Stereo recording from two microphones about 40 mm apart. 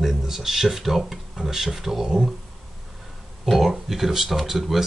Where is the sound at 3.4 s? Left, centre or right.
Centre.